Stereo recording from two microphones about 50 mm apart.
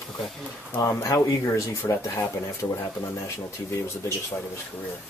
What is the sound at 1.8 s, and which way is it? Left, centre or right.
Speech, left.